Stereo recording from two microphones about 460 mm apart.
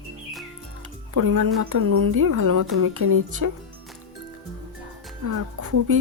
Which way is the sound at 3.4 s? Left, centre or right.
Right.